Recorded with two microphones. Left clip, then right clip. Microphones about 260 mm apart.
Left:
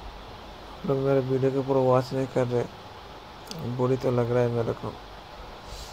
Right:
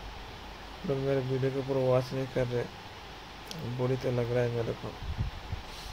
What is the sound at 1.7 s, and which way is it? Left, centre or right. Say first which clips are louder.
Speech: left 4 dB; centre.